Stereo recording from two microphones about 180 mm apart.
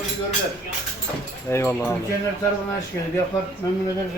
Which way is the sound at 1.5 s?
15° left (ahead or behind).